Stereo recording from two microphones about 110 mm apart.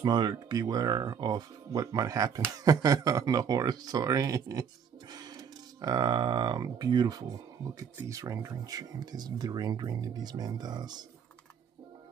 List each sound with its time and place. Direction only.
0.0 s speech: 40° right (ahead or behind)